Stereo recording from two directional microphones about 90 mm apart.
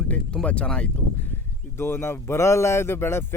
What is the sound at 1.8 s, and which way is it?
Speech, 30° left (ahead or behind).